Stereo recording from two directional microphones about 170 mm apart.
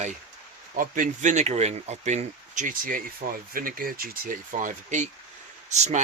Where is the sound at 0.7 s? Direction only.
50° right (ahead or behind).